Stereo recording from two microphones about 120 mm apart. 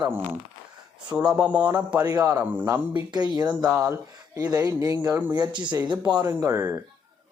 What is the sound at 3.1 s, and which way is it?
Speech, 35° right (ahead or behind).